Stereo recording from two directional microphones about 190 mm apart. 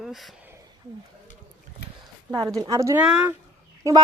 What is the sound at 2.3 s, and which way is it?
Speech, 20° right (ahead or behind).